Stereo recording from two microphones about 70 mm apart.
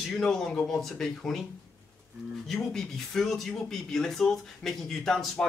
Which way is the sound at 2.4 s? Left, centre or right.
Centre.